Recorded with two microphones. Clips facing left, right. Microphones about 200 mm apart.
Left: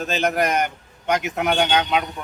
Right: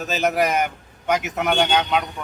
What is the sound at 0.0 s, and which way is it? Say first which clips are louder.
A man's voice: right 1 dB; 5° right (ahead or behind).